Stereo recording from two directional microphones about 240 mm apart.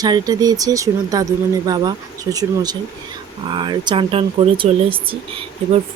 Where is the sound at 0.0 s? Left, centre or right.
Centre.